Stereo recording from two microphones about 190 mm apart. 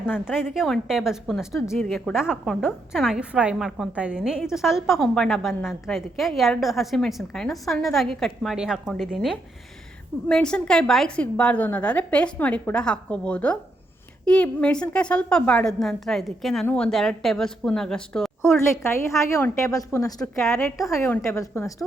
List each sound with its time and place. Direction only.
0.0 s a woman's voice: 5° right (ahead or behind)
10.2 s a woman's voice: 5° left (ahead or behind)